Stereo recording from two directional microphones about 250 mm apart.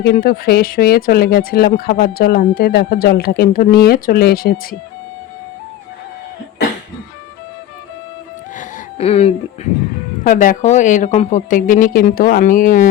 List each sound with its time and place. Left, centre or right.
0.0 s speech: left
8.5 s a sound: left
10.2 s speech: left